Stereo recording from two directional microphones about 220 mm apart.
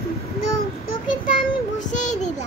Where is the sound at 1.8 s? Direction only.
35° left (ahead or behind).